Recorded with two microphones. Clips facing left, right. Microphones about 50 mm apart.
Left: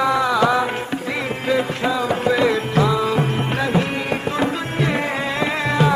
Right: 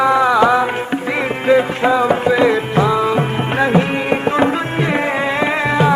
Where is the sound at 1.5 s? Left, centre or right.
Right.